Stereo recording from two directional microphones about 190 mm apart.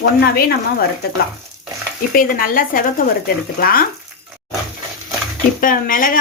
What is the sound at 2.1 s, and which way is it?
A woman's voice, 45° left (ahead or behind).